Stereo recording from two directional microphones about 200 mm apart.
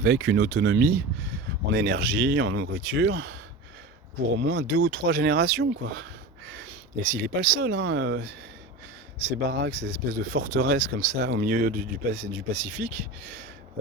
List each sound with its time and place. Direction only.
0.0 s speech: 50° right (ahead or behind)
4.4 s speech: 55° right (ahead or behind)
9.5 s speech: 55° right (ahead or behind)